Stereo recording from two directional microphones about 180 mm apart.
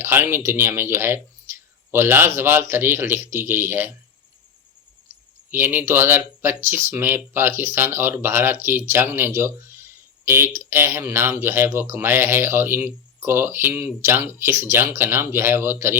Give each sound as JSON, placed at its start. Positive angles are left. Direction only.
{"t": 0.0, "sound": "speech", "side_deg": -15}
{"t": 5.5, "sound": "speech", "side_deg": -10}